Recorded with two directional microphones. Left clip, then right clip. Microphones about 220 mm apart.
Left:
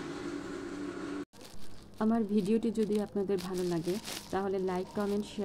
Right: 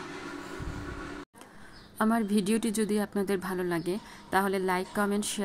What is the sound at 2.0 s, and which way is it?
A woman's voice, 55° right (ahead or behind).